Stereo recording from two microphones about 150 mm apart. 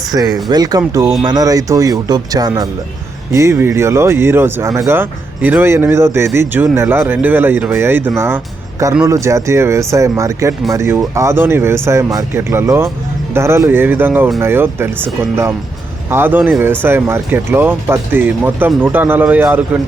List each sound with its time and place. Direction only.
0.4 s speech: 25° right (ahead or behind)